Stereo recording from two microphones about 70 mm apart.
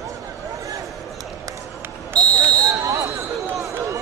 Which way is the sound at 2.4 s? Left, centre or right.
Right.